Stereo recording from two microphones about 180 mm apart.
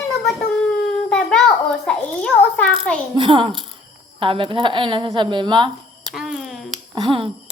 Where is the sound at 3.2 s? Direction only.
30° right (ahead or behind).